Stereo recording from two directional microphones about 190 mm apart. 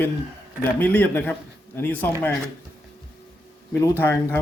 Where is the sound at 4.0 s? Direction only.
10° left (ahead or behind).